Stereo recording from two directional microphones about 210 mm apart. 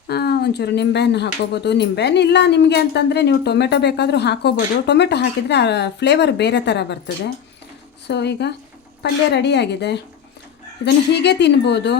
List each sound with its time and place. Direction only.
0.1 s speech: 50° left (ahead or behind)
8.0 s speech: 55° left (ahead or behind)